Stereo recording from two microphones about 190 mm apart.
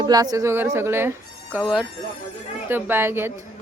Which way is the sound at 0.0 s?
20° right (ahead or behind).